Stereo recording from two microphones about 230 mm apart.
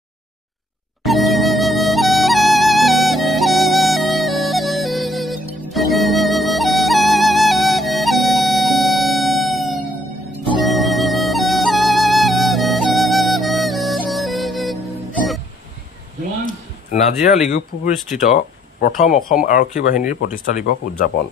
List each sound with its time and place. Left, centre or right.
1.0 s music: centre
16.9 s speech: left